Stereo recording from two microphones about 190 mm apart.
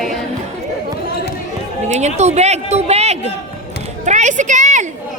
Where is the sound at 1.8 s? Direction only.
35° right (ahead or behind).